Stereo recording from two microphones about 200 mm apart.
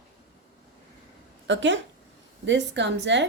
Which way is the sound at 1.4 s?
65° right (ahead or behind).